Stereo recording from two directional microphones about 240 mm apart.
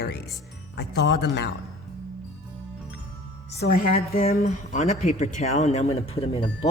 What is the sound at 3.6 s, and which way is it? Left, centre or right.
A woman's voice, left.